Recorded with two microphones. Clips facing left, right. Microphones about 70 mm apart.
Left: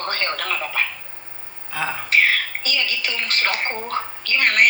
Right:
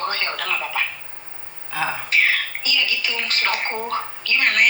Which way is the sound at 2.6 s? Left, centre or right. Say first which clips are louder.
Right 1 dB; left.